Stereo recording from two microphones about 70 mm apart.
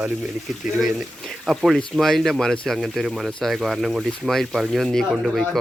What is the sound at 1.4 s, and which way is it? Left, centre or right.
Speech, centre.